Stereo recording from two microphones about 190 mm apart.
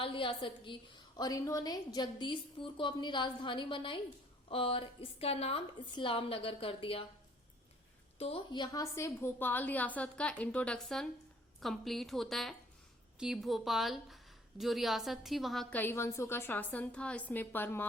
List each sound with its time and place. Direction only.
0.0 s a woman's voice: 25° left (ahead or behind)
8.2 s a woman's voice: 25° left (ahead or behind); by 17.8 s 10° left (ahead or behind)